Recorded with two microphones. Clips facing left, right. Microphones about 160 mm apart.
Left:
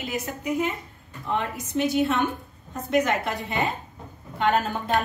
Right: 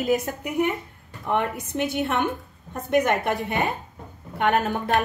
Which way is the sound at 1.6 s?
55° right (ahead or behind).